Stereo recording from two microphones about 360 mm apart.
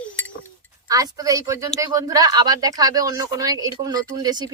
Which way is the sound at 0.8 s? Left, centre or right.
Centre.